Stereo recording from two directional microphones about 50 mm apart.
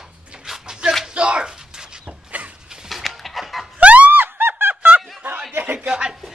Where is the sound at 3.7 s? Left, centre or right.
Right.